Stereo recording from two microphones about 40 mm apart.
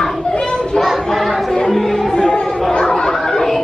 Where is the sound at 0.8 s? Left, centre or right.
Centre.